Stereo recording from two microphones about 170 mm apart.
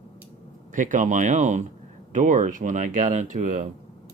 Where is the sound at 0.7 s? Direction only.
50° right (ahead or behind).